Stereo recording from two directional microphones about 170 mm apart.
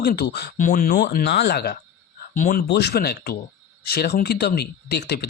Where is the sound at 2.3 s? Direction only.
50° left (ahead or behind).